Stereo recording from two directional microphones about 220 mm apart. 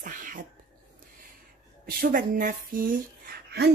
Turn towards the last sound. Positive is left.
turn(degrees=-45)  # may be behind; listen again after turning